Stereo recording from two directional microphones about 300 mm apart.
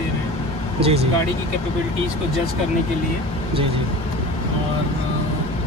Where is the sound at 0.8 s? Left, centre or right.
Centre.